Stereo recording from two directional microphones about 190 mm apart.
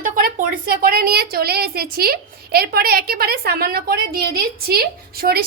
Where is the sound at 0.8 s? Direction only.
50° right (ahead or behind).